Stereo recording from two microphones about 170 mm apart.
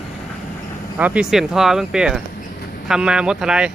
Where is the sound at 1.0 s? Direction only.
10° right (ahead or behind).